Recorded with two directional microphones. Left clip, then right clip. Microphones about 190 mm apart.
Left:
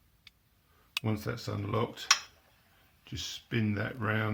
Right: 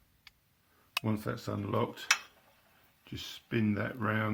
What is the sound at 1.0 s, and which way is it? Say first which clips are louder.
Speech: even; 35° right (ahead or behind).